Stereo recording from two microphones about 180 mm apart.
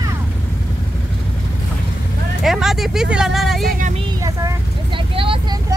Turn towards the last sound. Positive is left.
turn(degrees=-30)  # may be behind; listen again after turning